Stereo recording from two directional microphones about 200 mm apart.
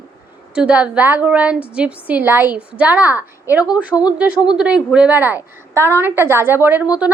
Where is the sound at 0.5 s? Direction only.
5° right (ahead or behind).